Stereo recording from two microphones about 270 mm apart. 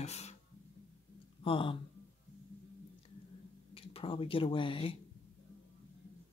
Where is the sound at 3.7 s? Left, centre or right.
Left.